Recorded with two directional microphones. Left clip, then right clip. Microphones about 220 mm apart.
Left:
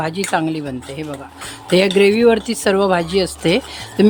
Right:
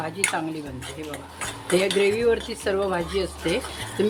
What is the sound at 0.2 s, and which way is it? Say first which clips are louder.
Speech: left 2 dB; 55° left (ahead or behind).